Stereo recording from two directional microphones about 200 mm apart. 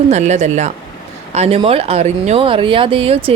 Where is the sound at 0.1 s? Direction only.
35° right (ahead or behind).